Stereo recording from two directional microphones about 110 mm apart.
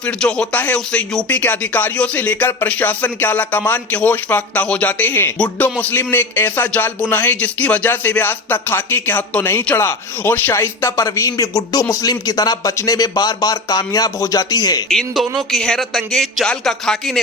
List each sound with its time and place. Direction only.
0.0 s a man's voice: 10° left (ahead or behind); by 14.8 s 35° left (ahead or behind)
14.8 s speech: centre (ahead or behind)